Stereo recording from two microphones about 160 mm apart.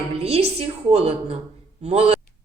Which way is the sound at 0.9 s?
40° right (ahead or behind).